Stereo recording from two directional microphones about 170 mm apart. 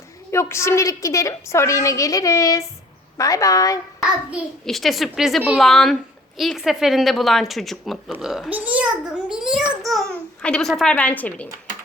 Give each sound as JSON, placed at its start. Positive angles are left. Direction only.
{"t": 0.3, "sound": "a woman's voice", "side_deg": 15}
{"t": 4.3, "sound": "a child's voice", "side_deg": 0}